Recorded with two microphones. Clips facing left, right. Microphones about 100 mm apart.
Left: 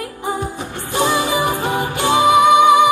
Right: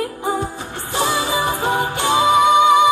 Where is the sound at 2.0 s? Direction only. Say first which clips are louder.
Left 3 dB; 15° left (ahead or behind).